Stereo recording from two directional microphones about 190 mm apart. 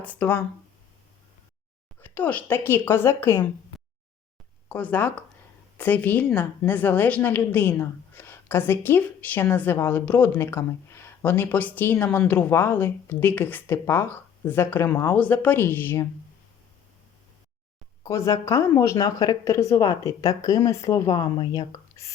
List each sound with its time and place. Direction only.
0.0 s a woman's voice: 10° left (ahead or behind)
2.0 s a woman's voice: 10° left (ahead or behind)
4.7 s a woman's voice: 10° left (ahead or behind)
18.0 s a woman's voice: 15° left (ahead or behind)